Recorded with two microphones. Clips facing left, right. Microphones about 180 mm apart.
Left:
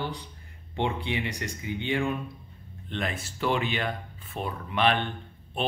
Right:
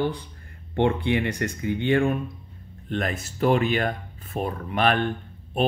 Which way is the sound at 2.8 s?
45° right (ahead or behind).